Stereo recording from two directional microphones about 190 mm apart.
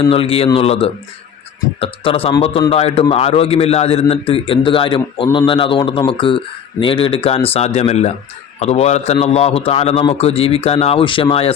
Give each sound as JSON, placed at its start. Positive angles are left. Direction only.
{"t": 0.0, "sound": "a man's voice", "side_deg": 30}